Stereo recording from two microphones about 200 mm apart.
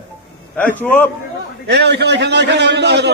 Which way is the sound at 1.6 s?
55° right (ahead or behind).